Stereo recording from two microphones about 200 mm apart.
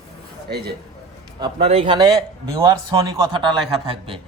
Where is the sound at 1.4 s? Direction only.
30° right (ahead or behind).